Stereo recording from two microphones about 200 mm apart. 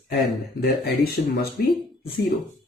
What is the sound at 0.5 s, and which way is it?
Speech, 55° left (ahead or behind).